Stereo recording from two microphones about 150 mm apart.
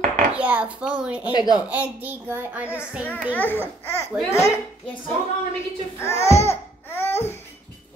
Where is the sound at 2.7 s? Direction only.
10° left (ahead or behind).